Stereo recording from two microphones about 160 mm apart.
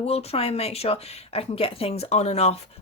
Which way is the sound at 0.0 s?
40° left (ahead or behind).